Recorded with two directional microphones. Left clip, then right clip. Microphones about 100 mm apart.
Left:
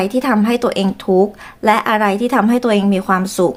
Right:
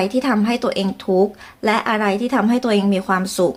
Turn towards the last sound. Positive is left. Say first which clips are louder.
# left 3 dB
turn(degrees=30)  # may be behind; listen again after turning